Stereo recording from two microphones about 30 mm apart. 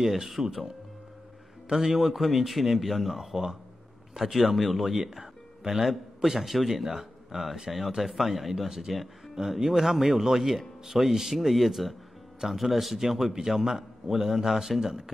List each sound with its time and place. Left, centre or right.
0.0 s a man's voice: centre
1.7 s a man's voice: centre